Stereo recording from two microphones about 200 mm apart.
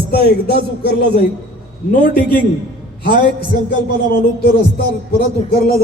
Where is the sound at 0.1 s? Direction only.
50° left (ahead or behind).